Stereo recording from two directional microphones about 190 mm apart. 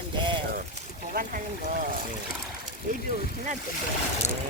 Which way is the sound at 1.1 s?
50° right (ahead or behind).